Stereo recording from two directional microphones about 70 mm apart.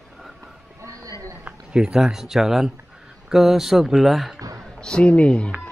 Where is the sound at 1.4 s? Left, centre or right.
Centre.